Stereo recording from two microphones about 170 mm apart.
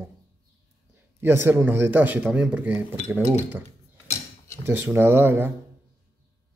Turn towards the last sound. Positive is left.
turn(degrees=-10)  # may be behind; listen again after turning